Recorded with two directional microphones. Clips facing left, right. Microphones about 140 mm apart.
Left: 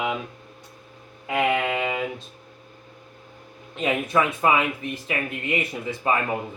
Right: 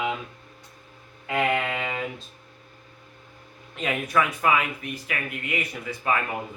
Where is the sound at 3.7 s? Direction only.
25° left (ahead or behind).